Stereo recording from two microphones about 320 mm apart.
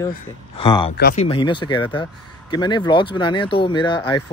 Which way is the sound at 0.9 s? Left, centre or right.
Left.